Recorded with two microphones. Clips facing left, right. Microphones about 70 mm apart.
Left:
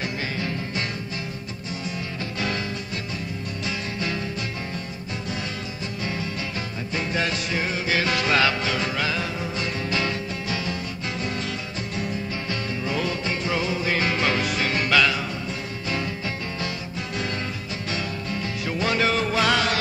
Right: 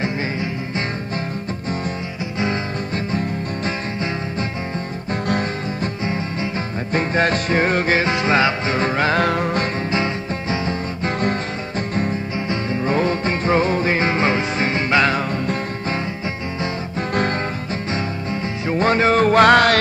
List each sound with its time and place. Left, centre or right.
0.0 s music: right
6.9 s music: right
8.0 s music: right
8.7 s music: right
9.2 s music: right
9.8 s music: right
12.8 s music: right
13.9 s music: right
17.9 s music: right